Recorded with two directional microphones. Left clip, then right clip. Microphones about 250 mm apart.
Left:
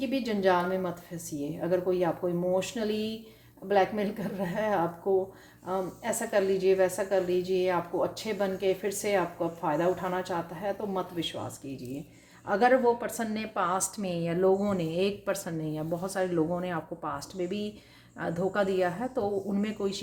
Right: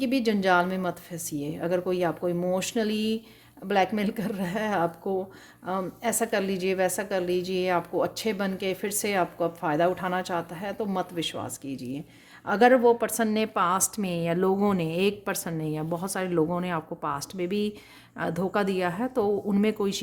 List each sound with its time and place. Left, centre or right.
0.0 s a woman's voice: right
12.5 s a woman's voice: right